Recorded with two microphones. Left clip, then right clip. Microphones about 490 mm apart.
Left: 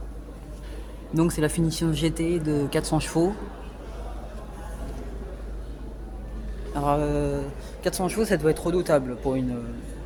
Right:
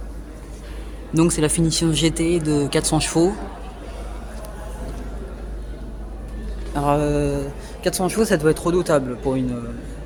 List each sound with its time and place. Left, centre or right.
1.1 s speech: left
6.7 s speech: left